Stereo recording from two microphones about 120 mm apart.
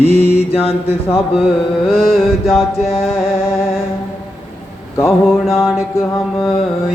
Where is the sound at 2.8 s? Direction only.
55° left (ahead or behind).